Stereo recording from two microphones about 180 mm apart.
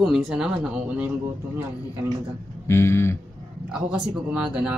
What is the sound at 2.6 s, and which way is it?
Speech, 15° left (ahead or behind).